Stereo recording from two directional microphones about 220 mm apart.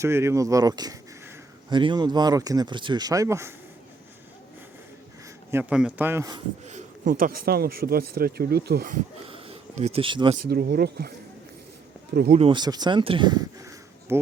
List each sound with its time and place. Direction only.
0.0 s speech: 10° right (ahead or behind)
5.5 s speech: 10° right (ahead or behind)
6.7 s speech: 35° right (ahead or behind)
9.3 s a sound: 30° right (ahead or behind)
10.5 s speech: 45° right (ahead or behind)
12.1 s speech: 45° right (ahead or behind)
12.4 s speech: 20° right (ahead or behind)